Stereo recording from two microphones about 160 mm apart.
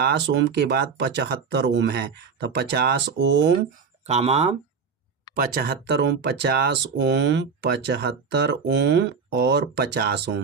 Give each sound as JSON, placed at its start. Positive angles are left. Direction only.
{"t": 0.0, "sound": "speech", "side_deg": -90}
{"t": 4.0, "sound": "speech", "side_deg": -40}
{"t": 5.3, "sound": "speech", "side_deg": -65}